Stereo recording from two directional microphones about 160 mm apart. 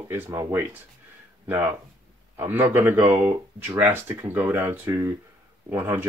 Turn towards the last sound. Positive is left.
turn(degrees=-15)  # may be behind; listen again after turning